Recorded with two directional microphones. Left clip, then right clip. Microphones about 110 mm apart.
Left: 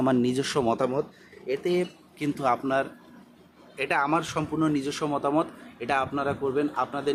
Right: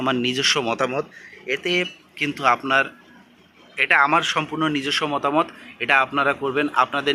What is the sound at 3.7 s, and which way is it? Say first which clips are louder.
A man's voice: right 8 dB; 15° left (ahead or behind).